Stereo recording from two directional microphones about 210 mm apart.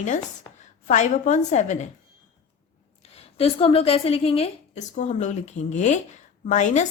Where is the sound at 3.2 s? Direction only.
30° left (ahead or behind).